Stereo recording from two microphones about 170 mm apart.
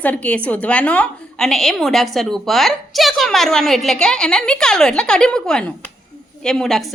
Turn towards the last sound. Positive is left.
turn(degrees=0)  # may be behind; listen again after turning